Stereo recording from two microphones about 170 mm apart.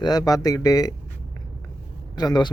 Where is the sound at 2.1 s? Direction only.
25° left (ahead or behind).